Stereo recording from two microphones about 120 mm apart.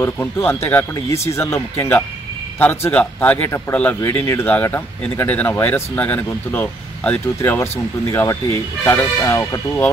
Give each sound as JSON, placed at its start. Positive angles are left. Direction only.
{"t": 0.0, "sound": "speech", "side_deg": 20}